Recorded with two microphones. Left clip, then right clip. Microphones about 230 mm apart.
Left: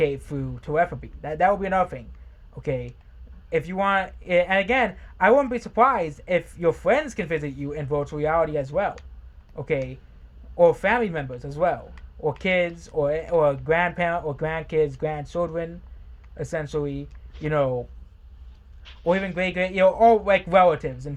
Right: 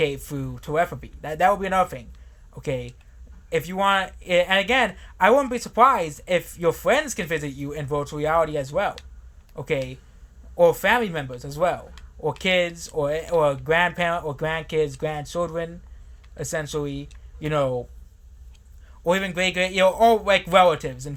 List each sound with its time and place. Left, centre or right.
0.0 s speech: centre
19.0 s speech: centre